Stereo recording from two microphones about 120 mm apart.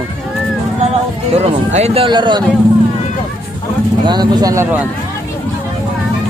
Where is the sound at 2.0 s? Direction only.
40° right (ahead or behind).